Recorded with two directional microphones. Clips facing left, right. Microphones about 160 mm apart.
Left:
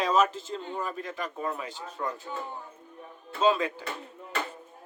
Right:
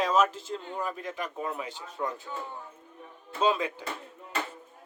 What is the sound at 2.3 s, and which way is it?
Speech, 20° left (ahead or behind).